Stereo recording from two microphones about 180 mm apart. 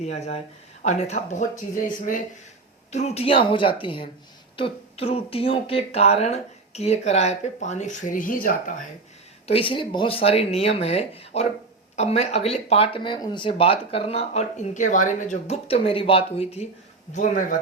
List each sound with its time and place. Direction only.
0.0 s a woman's voice: 40° left (ahead or behind)
9.5 s speech: 30° left (ahead or behind); by 17.6 s 45° left (ahead or behind)